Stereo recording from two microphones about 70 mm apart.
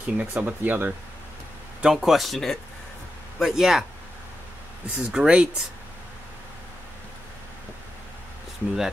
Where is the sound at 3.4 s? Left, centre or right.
Centre.